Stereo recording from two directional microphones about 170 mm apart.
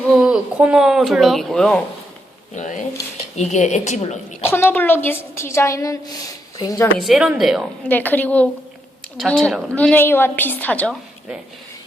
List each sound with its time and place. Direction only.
0.1 s speech: 5° right (ahead or behind)
2.6 s a woman's voice: 45° left (ahead or behind)
4.4 s a woman's voice: 15° left (ahead or behind)
7.0 s speech: 5° right (ahead or behind)
7.9 s a woman's voice: 10° left (ahead or behind)